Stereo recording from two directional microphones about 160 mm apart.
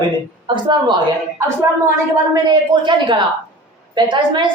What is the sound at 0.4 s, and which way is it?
Speech, 30° right (ahead or behind).